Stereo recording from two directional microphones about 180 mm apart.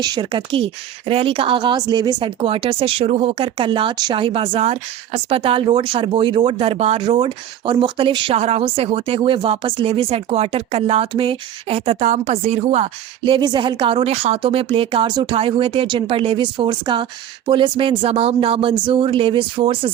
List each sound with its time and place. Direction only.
0.0 s speech: 25° right (ahead or behind)